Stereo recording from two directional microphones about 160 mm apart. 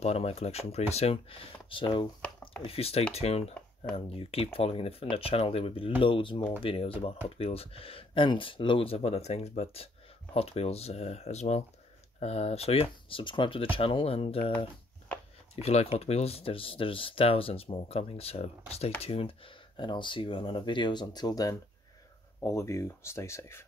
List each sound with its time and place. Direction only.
0.0 s speech: 40° left (ahead or behind); by 23.6 s 15° left (ahead or behind)